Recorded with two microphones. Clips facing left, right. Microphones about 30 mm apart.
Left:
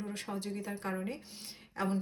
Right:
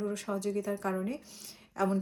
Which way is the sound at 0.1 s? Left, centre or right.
Left.